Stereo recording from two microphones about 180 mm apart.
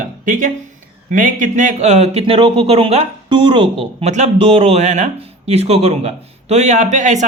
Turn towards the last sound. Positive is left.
turn(degrees=-40)  # may be behind; listen again after turning